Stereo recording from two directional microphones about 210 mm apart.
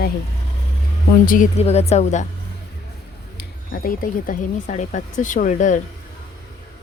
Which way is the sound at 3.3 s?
45° left (ahead or behind).